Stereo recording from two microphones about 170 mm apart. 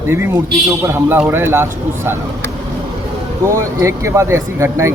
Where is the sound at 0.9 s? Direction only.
15° right (ahead or behind).